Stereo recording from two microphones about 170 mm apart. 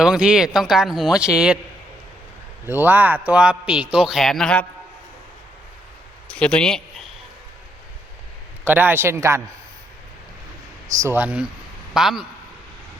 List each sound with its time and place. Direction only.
0.0 s speech: 5° right (ahead or behind)
2.6 s a man's voice: 10° right (ahead or behind); by 4.6 s 5° left (ahead or behind)
6.2 s a man's voice: 5° left (ahead or behind)
8.6 s a man's voice: 10° right (ahead or behind)
10.8 s a man's voice: 20° right (ahead or behind); by 12.2 s centre (ahead or behind)